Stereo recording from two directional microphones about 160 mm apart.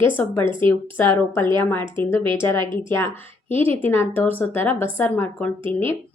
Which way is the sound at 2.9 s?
15° left (ahead or behind).